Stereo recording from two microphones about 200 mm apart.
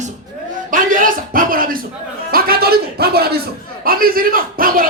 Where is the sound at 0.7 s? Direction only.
45° right (ahead or behind).